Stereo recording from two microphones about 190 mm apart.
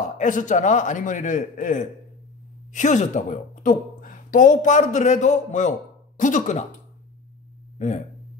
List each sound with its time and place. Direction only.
0.2 s a man's voice: 40° left (ahead or behind)
7.8 s a man's voice: 40° left (ahead or behind)